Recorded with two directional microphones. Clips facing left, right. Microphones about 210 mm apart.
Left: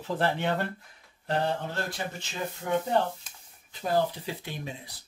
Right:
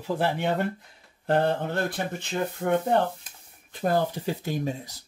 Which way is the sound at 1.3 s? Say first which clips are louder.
Right 5 dB; 55° right (ahead or behind).